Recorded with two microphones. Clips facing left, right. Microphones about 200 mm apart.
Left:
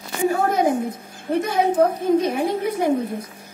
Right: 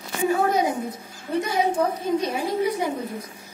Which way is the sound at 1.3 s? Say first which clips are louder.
Left 3 dB; 55° left (ahead or behind).